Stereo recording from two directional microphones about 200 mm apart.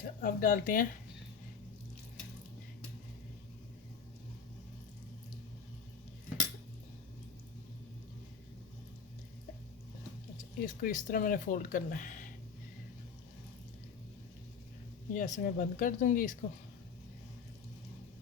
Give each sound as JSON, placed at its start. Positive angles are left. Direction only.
{"t": 0.0, "sound": "speech", "side_deg": 40}
{"t": 10.7, "sound": "speech", "side_deg": 45}
{"t": 15.1, "sound": "speech", "side_deg": 40}